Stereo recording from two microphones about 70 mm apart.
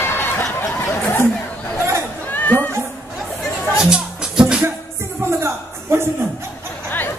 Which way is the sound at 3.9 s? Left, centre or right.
Centre.